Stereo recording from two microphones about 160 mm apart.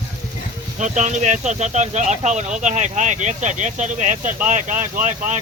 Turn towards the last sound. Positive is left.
turn(degrees=-50)  # may be behind; listen again after turning